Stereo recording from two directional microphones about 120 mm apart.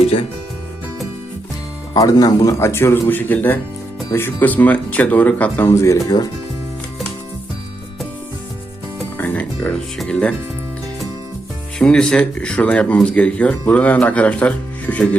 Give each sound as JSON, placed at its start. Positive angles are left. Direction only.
{"t": 0.0, "sound": "speech", "side_deg": 50}
{"t": 1.9, "sound": "speech", "side_deg": 30}
{"t": 9.1, "sound": "music", "side_deg": 15}
{"t": 10.0, "sound": "speech", "side_deg": 10}
{"t": 11.8, "sound": "speech", "side_deg": 5}